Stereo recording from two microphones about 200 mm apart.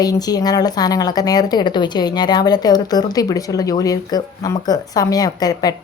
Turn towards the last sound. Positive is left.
turn(degrees=20)  # may be behind; listen again after turning